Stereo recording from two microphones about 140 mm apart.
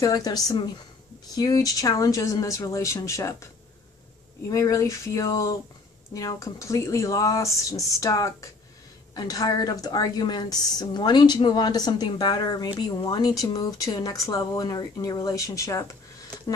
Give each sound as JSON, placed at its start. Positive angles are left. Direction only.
{"t": 0.0, "sound": "a woman's voice", "side_deg": 25}
{"t": 4.5, "sound": "a woman's voice", "side_deg": 25}